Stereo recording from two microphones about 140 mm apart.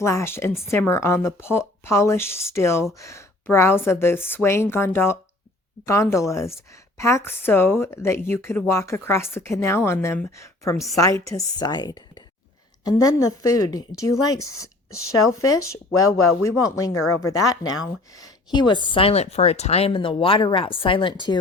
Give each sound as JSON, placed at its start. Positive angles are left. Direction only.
{"t": 0.0, "sound": "a woman's voice", "side_deg": 20}